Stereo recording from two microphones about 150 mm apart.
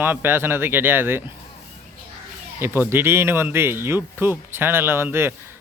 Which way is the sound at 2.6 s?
15° right (ahead or behind).